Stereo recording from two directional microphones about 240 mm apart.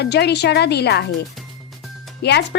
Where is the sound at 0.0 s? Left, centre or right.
Left.